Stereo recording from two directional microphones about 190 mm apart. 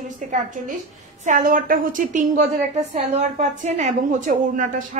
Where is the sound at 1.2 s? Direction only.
45° right (ahead or behind).